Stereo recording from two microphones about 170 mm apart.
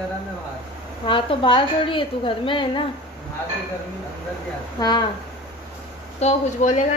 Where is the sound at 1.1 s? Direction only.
30° left (ahead or behind).